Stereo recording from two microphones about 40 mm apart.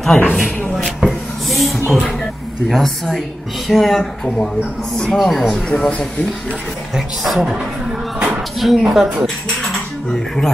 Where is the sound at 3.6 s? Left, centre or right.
Centre.